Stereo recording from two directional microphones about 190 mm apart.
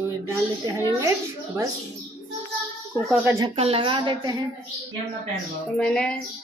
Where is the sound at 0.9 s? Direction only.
15° right (ahead or behind).